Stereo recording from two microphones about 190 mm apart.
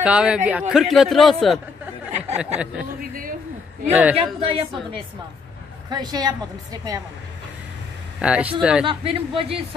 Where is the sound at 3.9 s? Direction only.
10° right (ahead or behind).